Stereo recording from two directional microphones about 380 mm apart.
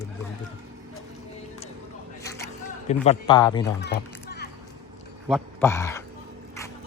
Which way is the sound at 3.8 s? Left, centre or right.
Left.